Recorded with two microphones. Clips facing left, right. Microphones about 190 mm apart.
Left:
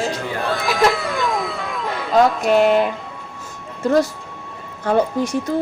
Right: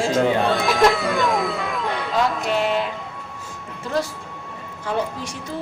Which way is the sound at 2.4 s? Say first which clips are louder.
Left 7 dB; 50° left (ahead or behind).